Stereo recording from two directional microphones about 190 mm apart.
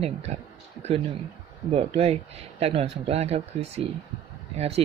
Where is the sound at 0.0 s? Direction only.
35° right (ahead or behind).